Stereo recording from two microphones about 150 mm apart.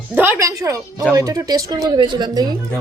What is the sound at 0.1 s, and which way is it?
Speech, 15° right (ahead or behind).